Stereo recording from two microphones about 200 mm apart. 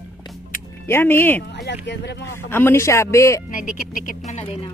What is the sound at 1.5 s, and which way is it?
Speech, 60° left (ahead or behind).